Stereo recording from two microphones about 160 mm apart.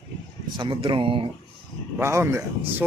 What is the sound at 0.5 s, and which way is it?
Speech, 35° right (ahead or behind).